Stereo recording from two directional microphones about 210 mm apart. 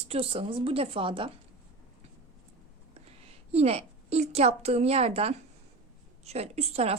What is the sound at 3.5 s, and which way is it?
A woman's voice, 30° right (ahead or behind).